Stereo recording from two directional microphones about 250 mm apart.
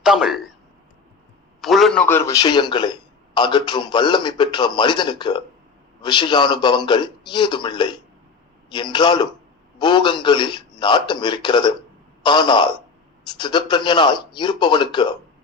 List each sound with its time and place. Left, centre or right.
0.0 s a man's voice: centre
1.6 s a man's voice: centre